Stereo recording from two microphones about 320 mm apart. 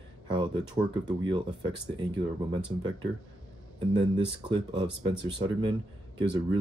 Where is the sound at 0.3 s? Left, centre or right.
Centre.